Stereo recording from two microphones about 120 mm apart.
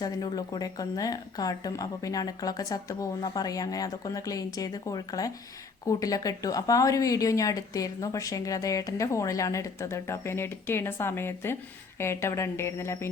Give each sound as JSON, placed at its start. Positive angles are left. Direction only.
{"t": 0.0, "sound": "speech", "side_deg": 35}